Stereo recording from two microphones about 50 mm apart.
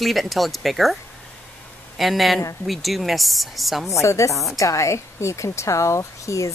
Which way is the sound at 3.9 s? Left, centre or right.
Left.